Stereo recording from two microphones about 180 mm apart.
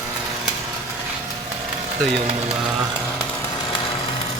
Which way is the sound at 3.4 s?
20° left (ahead or behind).